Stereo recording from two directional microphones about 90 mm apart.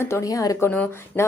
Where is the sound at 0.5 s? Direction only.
25° left (ahead or behind).